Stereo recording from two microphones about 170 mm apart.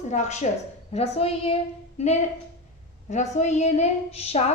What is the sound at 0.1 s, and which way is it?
A woman's voice, 45° left (ahead or behind).